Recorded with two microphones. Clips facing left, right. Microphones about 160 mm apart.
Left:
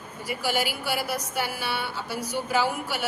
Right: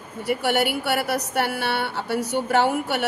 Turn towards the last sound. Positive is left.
turn(degrees=-65)  # may be behind; listen again after turning